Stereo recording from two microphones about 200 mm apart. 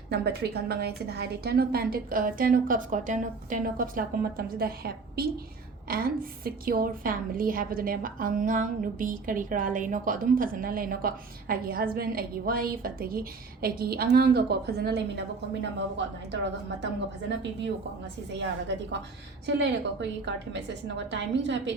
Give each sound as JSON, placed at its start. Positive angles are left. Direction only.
{"t": 0.1, "sound": "a woman's voice", "side_deg": -55}
{"t": 16.8, "sound": "a woman's voice", "side_deg": -60}